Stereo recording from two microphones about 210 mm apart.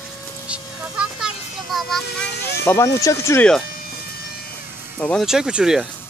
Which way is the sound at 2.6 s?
15° left (ahead or behind).